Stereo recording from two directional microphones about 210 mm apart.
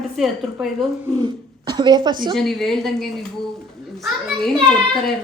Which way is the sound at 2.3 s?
Centre (ahead or behind).